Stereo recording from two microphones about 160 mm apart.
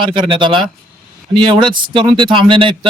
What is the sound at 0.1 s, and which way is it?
A man's voice, 30° right (ahead or behind).